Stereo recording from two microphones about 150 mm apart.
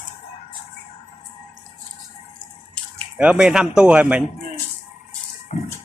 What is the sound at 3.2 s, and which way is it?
Speech, 5° right (ahead or behind).